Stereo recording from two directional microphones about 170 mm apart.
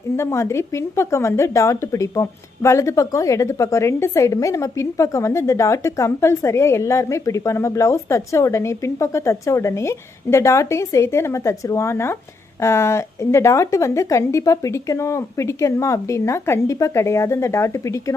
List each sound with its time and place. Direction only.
0.2 s speech: 15° left (ahead or behind)